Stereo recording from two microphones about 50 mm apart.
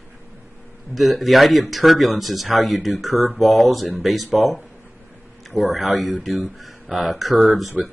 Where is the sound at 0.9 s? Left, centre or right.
Centre.